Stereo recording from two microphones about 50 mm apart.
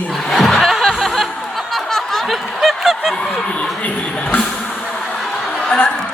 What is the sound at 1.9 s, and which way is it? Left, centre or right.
Snicker, centre.